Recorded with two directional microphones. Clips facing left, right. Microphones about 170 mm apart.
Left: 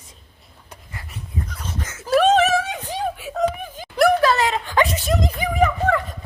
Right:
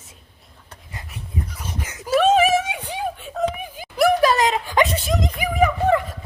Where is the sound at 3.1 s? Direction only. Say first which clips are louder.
Left 2 dB; 5° left (ahead or behind).